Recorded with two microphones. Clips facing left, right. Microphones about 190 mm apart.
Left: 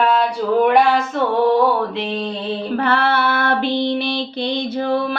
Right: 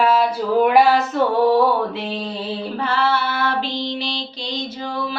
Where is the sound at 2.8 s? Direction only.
60° left (ahead or behind).